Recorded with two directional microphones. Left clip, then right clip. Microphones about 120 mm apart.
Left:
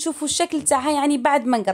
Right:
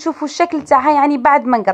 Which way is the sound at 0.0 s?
15° left (ahead or behind).